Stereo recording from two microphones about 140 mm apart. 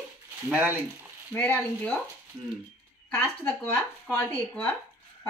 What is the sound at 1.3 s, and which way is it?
Speech, 10° left (ahead or behind).